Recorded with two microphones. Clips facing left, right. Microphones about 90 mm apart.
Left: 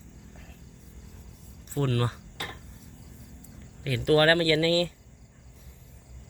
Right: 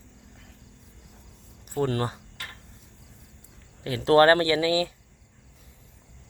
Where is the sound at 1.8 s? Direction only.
25° right (ahead or behind).